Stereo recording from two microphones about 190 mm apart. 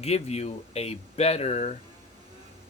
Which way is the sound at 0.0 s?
35° left (ahead or behind).